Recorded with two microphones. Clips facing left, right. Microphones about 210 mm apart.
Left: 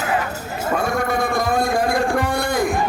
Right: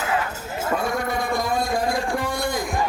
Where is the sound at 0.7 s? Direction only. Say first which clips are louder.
Left 4 dB; 75° left (ahead or behind).